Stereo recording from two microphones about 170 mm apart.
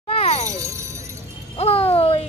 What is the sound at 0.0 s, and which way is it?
Music, 35° left (ahead or behind).